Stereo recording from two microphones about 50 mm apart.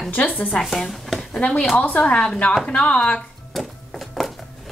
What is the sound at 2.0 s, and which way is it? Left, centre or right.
Speech, centre.